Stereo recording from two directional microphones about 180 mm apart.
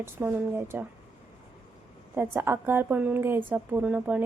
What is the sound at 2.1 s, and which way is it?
A woman's voice, 10° right (ahead or behind).